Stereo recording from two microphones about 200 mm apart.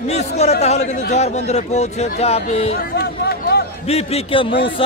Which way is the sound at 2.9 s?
50° left (ahead or behind).